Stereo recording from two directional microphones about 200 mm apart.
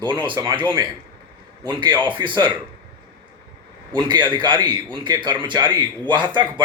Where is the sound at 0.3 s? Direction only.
25° right (ahead or behind).